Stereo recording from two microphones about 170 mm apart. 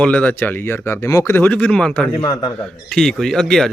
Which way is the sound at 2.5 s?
5° left (ahead or behind).